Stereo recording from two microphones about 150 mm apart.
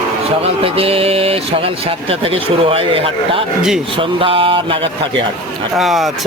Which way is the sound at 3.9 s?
35° right (ahead or behind).